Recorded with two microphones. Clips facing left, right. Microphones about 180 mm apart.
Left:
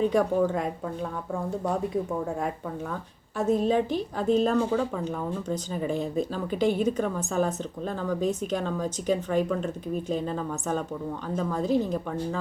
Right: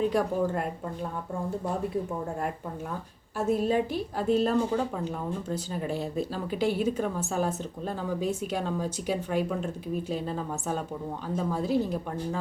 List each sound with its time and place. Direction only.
0.0 s speech: 5° right (ahead or behind)
3.3 s speech: 10° right (ahead or behind)